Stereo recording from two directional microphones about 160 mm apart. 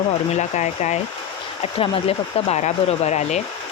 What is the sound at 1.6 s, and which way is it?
Speech, 35° left (ahead or behind).